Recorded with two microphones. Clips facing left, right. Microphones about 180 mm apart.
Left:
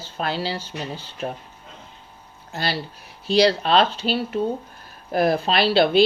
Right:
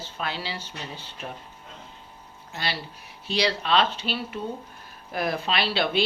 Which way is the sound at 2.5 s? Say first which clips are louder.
Left 5 dB; 35° left (ahead or behind).